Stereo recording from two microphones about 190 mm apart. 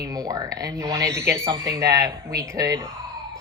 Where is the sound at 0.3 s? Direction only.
20° right (ahead or behind).